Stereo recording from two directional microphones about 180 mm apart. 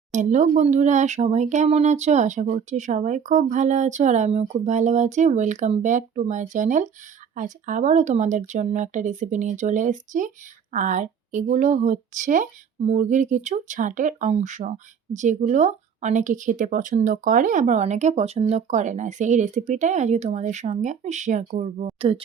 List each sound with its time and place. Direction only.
0.1 s speech: 45° right (ahead or behind)